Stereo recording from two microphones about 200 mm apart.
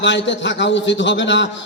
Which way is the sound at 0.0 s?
65° left (ahead or behind).